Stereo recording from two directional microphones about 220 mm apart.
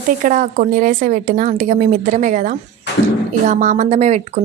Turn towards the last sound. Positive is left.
turn(degrees=-30)  # may be behind; listen again after turning